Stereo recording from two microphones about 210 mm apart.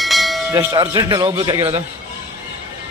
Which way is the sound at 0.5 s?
15° right (ahead or behind).